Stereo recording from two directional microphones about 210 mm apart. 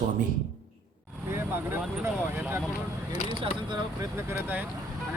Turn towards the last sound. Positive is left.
turn(degrees=-10)  # may be behind; listen again after turning